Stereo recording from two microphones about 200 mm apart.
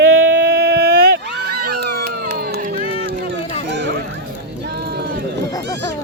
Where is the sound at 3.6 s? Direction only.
60° right (ahead or behind).